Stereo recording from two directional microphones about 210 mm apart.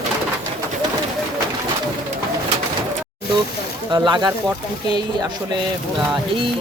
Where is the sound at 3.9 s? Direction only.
20° right (ahead or behind).